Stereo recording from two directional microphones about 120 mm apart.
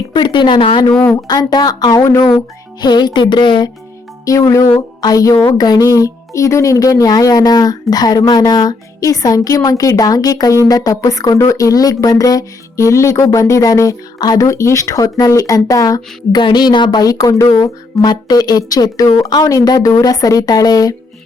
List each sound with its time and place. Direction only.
0.1 s speech: 40° left (ahead or behind)
4.3 s speech: 25° left (ahead or behind)
4.9 s music: 30° left (ahead or behind)
5.5 s speech: 35° left (ahead or behind)